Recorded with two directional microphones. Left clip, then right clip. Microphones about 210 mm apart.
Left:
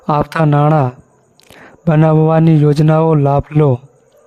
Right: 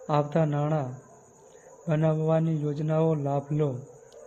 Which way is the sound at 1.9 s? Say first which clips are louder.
Left 14 dB; 55° left (ahead or behind).